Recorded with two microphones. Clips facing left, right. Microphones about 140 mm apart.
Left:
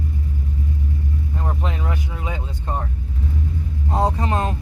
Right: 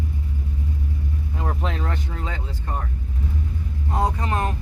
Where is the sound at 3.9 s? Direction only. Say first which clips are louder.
Left 3 dB; 25° left (ahead or behind).